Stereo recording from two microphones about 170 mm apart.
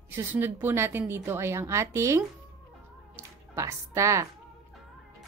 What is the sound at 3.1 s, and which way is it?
Music, 15° right (ahead or behind).